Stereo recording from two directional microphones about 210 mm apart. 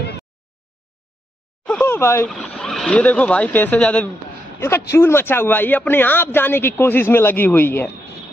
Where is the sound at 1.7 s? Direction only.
10° left (ahead or behind).